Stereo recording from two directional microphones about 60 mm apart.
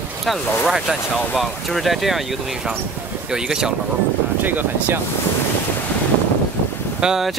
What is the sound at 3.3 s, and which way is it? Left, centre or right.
Speech, centre.